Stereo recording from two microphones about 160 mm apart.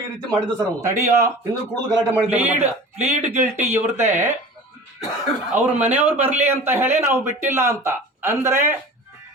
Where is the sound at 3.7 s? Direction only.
15° right (ahead or behind).